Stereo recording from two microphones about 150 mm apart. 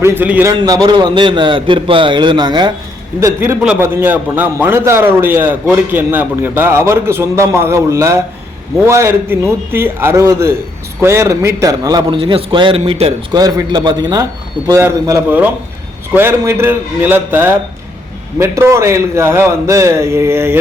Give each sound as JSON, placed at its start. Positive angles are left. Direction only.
{"t": 0.0, "sound": "a man's voice", "side_deg": -15}
{"t": 0.6, "sound": "a man's voice", "side_deg": -25}
{"t": 3.2, "sound": "a man's voice", "side_deg": -20}
{"t": 3.6, "sound": "a man's voice", "side_deg": -5}
{"t": 13.3, "sound": "a man's voice", "side_deg": -25}